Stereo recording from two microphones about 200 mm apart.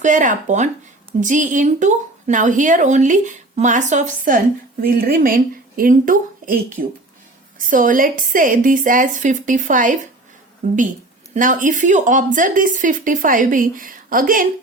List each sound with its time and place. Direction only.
0.0 s a woman's voice: 40° right (ahead or behind)